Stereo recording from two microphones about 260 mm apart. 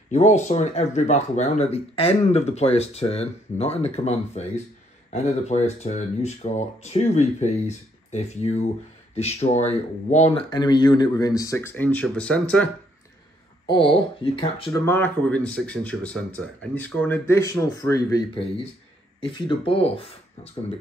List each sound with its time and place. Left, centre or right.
0.1 s speech: left; by 12.6 s centre
13.7 s speech: centre
14.9 s speech: centre; by 20.1 s left